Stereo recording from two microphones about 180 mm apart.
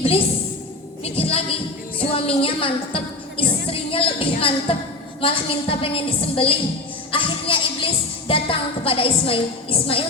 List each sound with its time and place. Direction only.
1.0 s music: 35° left (ahead or behind)
2.1 s a woman's voice: 30° left (ahead or behind)
7.1 s music: 30° left (ahead or behind)